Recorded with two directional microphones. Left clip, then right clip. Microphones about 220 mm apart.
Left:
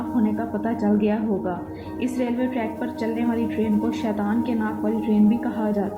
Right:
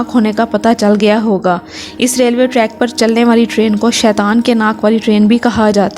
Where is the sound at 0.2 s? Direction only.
50° right (ahead or behind).